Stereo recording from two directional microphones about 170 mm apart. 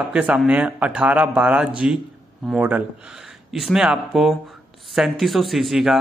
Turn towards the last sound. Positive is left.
turn(degrees=0)  # may be behind; listen again after turning